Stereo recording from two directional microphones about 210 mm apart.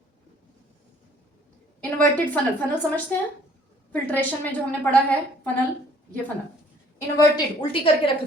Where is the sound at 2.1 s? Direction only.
10° left (ahead or behind).